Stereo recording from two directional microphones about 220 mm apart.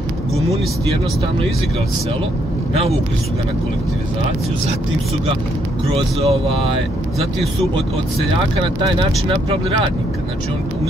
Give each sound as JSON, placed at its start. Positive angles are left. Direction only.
{"t": 5.9, "sound": "speech", "side_deg": -25}
{"t": 9.5, "sound": "speech", "side_deg": -25}